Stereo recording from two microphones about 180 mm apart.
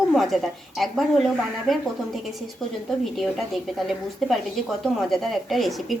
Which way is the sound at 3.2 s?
Centre (ahead or behind).